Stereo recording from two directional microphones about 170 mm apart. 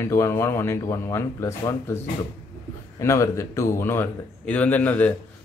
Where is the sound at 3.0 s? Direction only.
15° left (ahead or behind).